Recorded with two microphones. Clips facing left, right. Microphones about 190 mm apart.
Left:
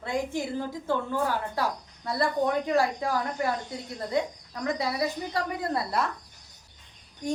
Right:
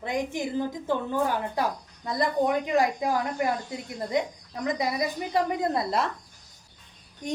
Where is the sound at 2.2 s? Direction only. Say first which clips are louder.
Right 1 dB; 15° right (ahead or behind).